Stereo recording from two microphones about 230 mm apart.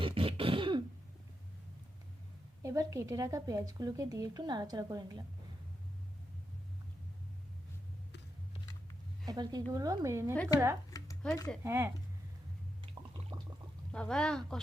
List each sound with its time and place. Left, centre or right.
0.0 s throat clearing: right
2.6 s a woman's voice: centre
9.2 s a woman's voice: centre
11.2 s speech: centre
11.6 s a woman's voice: centre
13.3 s pour: centre
13.9 s speech: centre